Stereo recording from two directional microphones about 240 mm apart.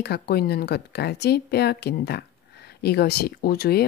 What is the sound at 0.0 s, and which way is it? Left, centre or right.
A woman's voice, left.